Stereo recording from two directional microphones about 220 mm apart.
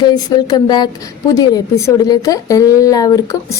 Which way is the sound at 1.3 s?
15° left (ahead or behind).